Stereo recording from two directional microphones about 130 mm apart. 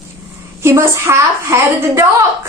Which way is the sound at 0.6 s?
20° right (ahead or behind).